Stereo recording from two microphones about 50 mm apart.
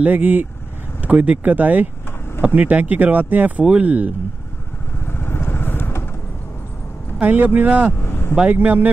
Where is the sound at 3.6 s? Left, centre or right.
Right.